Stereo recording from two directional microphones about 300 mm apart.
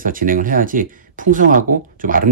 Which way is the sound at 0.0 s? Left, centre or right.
Right.